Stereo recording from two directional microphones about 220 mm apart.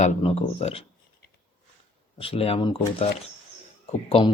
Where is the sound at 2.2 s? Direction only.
25° left (ahead or behind).